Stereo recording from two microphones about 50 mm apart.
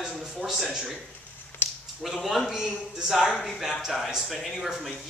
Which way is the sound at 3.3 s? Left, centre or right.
Centre.